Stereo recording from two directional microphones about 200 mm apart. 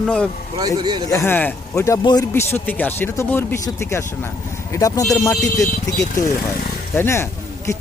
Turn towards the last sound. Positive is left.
turn(degrees=15)  # may be behind; listen again after turning